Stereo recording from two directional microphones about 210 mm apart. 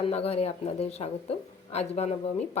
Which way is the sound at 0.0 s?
30° left (ahead or behind).